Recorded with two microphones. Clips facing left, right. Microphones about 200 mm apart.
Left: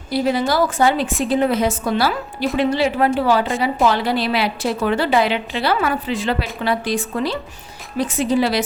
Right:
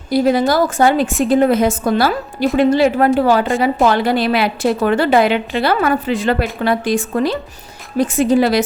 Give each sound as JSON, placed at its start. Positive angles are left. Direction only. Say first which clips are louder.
{"t": 0.1, "sound": "a woman's voice", "louder": "right 5 dB", "side_deg": -45}